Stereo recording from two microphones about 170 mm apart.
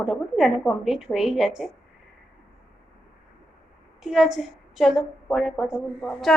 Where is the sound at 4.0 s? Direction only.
Centre (ahead or behind).